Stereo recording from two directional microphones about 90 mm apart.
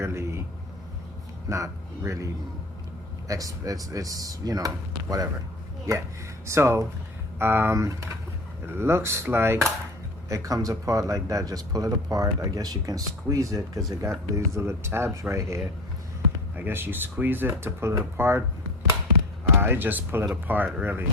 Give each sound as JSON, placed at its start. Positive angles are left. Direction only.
{"t": 0.0, "sound": "a sound", "side_deg": -30}
{"t": 1.5, "sound": "speech", "side_deg": -35}
{"t": 6.5, "sound": "speech", "side_deg": -30}
{"t": 16.6, "sound": "speech", "side_deg": -25}
{"t": 19.5, "sound": "speech", "side_deg": -25}